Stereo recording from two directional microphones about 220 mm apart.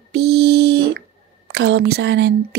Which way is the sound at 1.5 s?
50° right (ahead or behind).